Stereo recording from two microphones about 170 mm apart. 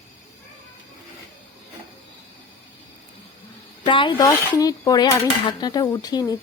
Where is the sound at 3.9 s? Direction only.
30° left (ahead or behind).